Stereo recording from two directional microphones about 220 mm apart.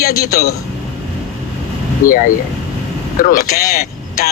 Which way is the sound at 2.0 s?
40° left (ahead or behind).